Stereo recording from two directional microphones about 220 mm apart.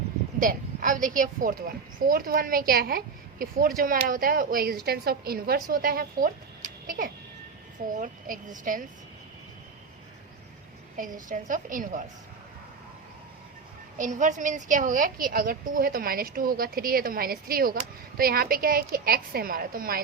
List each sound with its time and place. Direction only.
0.3 s a woman's voice: 40° right (ahead or behind)
10.9 s a woman's voice: 35° right (ahead or behind)
14.0 s a woman's voice: 35° right (ahead or behind)